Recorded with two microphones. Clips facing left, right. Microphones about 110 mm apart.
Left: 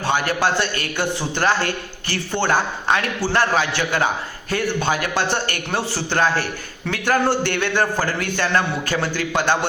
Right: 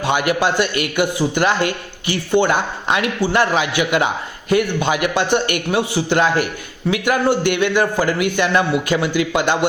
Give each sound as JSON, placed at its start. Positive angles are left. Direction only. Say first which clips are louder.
{"t": 0.0, "sound": "a man's voice", "louder": "right 3 dB", "side_deg": -15}